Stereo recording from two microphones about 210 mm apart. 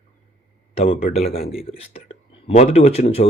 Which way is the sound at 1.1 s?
30° left (ahead or behind).